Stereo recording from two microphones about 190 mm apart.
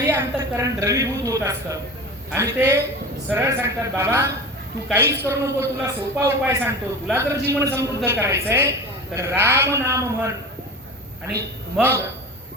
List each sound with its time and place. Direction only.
0.1 s a woman's voice: 15° right (ahead or behind)
11.3 s a woman's voice: 15° right (ahead or behind)